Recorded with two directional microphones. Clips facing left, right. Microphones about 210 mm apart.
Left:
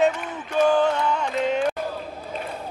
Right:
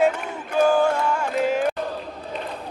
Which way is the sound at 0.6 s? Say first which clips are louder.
Right 1 dB; 10° right (ahead or behind).